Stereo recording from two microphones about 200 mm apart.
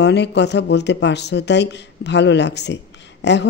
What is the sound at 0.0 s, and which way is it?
Speech, 60° left (ahead or behind).